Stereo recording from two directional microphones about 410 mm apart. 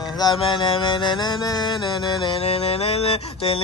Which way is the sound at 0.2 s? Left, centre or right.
Centre.